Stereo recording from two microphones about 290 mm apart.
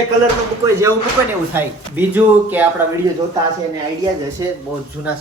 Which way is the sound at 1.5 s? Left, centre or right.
Centre.